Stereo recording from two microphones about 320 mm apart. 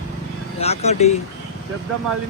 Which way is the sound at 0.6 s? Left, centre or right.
Centre.